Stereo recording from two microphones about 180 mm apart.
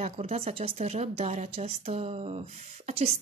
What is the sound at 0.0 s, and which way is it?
A woman's voice, 35° right (ahead or behind).